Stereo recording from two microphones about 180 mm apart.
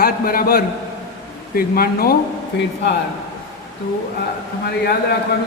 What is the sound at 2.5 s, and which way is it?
Speech, 70° left (ahead or behind).